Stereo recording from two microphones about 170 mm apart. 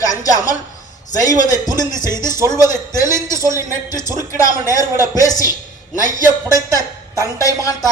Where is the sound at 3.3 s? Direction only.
20° left (ahead or behind).